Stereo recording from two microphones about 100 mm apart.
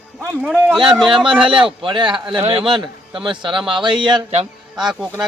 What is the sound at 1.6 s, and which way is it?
A man's voice, 55° right (ahead or behind).